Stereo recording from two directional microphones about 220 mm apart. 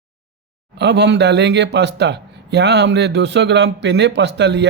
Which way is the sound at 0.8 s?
50° right (ahead or behind).